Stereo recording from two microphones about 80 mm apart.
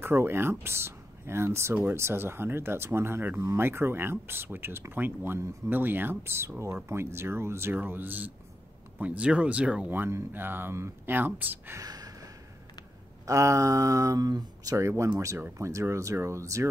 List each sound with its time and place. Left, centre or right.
0.0 s speech: right; by 9.9 s centre
9.9 s speech: right
11.8 s a sound: right
13.3 s speech: right
15.1 s speech: right